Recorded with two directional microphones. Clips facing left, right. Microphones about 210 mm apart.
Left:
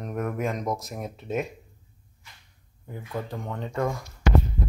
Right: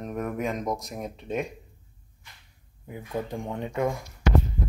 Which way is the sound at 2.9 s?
20° right (ahead or behind).